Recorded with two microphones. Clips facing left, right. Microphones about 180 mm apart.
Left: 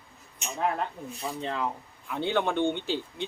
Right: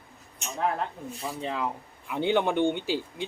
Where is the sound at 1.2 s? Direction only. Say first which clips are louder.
Even; 5° right (ahead or behind).